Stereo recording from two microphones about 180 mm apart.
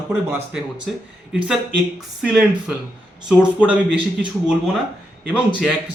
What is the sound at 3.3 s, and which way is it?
Speech, 5° right (ahead or behind).